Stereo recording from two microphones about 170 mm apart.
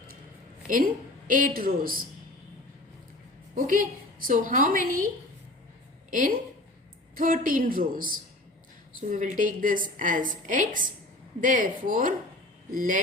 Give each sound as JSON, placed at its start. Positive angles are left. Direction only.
{"t": 0.7, "sound": "a woman's voice", "side_deg": -55}
{"t": 3.5, "sound": "a woman's voice", "side_deg": -55}
{"t": 6.1, "sound": "a woman's voice", "side_deg": -50}